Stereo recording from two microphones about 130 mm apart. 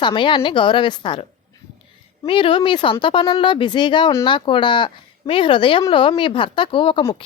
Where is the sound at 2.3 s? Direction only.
40° left (ahead or behind).